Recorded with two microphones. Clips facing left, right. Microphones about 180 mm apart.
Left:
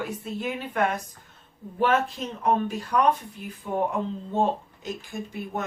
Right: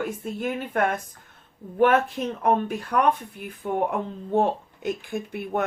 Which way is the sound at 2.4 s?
55° right (ahead or behind).